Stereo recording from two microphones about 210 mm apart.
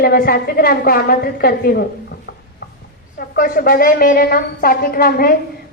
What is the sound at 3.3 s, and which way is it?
A woman's voice, 45° left (ahead or behind).